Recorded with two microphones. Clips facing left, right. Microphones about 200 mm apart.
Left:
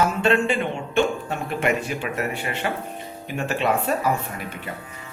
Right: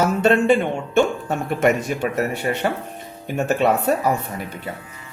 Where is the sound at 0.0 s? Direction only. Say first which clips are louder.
Right 3 dB; 45° right (ahead or behind).